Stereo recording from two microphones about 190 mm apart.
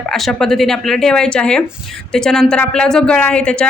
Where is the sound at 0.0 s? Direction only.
Centre (ahead or behind).